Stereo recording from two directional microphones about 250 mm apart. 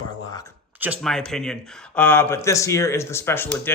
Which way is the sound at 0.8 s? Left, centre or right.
Centre.